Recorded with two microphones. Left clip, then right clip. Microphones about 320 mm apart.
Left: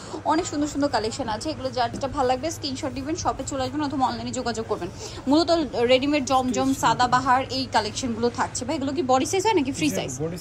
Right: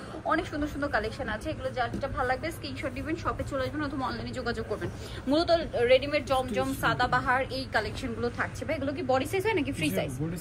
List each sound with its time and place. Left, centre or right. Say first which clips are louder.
0.4 s speech: left 7 dB; centre
2.1 s a woman's voice: left 7 dB; left
2.4 s speech: left 6 dB; centre